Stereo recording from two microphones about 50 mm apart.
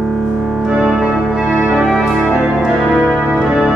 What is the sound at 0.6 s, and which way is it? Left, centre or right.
Organ, centre.